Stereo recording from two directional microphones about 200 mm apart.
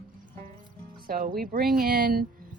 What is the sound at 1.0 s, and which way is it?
Speech, 45° right (ahead or behind).